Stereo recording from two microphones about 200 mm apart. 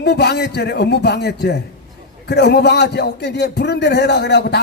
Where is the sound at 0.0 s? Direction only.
55° left (ahead or behind).